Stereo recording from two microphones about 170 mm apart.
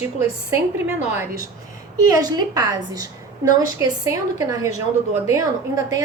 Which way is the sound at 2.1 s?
25° right (ahead or behind).